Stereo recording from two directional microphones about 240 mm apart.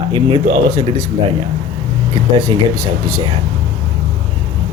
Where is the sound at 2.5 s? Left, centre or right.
Centre.